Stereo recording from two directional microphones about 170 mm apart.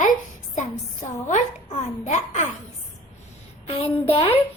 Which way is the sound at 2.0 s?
45° left (ahead or behind).